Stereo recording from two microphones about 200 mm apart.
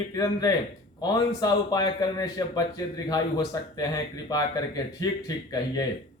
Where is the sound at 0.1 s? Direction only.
15° left (ahead or behind).